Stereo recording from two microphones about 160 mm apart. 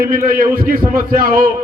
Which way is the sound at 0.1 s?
60° right (ahead or behind).